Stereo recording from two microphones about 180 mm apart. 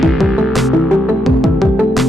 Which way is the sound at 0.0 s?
Centre (ahead or behind).